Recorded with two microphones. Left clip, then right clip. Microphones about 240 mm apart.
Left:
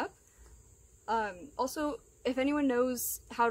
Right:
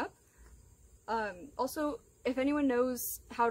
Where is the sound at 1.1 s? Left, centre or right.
Centre.